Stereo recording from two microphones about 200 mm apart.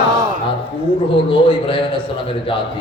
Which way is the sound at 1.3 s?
25° left (ahead or behind).